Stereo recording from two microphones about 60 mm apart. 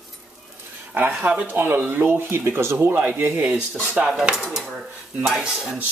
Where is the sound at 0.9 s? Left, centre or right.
Right.